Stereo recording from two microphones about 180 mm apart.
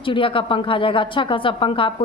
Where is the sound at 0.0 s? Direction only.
30° left (ahead or behind).